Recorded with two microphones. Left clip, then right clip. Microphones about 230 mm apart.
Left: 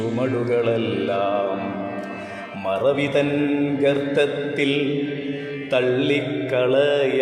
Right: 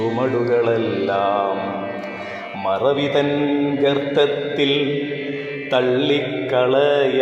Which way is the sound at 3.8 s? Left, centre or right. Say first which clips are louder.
Right 2 dB; centre.